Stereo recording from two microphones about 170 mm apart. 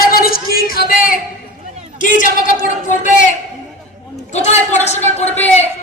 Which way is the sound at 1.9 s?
50° left (ahead or behind).